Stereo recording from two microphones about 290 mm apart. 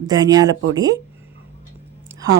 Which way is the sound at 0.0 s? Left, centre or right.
Centre.